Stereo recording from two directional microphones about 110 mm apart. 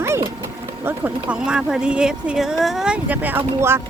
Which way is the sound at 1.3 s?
5° right (ahead or behind).